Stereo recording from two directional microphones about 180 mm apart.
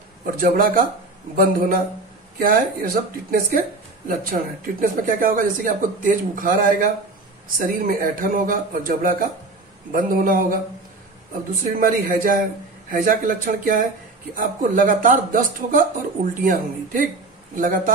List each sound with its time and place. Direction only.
0.4 s speech: 50° right (ahead or behind)
11.6 s speech: 50° right (ahead or behind)